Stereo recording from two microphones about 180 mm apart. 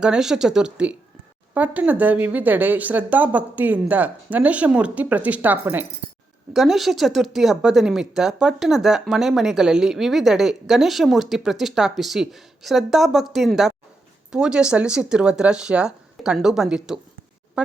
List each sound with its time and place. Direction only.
0.0 s speech: 5° right (ahead or behind)